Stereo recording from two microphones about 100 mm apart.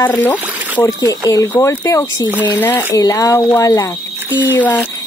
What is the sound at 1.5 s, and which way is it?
Speech, 20° left (ahead or behind).